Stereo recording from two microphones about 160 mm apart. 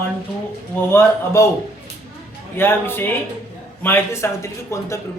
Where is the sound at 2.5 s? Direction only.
15° left (ahead or behind).